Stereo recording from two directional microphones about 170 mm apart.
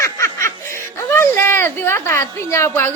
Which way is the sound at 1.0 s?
15° left (ahead or behind).